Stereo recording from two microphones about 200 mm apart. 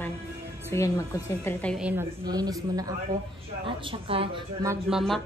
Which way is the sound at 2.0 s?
20° right (ahead or behind).